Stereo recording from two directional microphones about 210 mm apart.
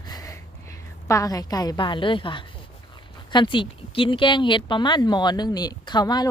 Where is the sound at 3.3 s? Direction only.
20° left (ahead or behind).